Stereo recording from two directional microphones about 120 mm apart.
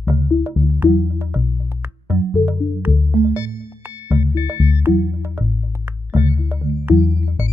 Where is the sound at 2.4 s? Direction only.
15° right (ahead or behind).